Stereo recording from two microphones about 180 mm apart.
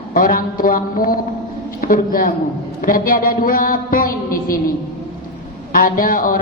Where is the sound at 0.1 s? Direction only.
50° left (ahead or behind).